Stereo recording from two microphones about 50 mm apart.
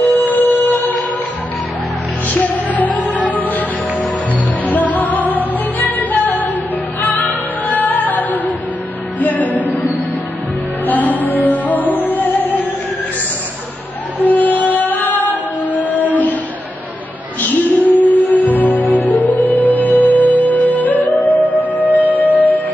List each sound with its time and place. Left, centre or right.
0.0 s music: left
2.2 s music: left
4.6 s music: left
14.2 s music: left
17.4 s music: left